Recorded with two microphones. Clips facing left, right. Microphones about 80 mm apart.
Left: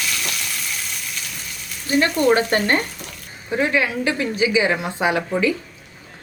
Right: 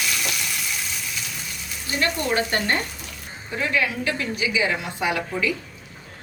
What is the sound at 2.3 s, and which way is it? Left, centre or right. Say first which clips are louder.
Speech: left 4 dB; left.